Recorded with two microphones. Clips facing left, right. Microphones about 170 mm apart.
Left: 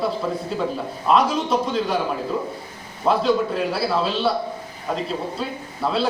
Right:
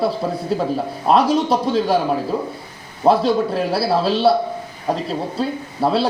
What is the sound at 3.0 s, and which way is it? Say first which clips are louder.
A man's voice: right 4 dB; 30° right (ahead or behind).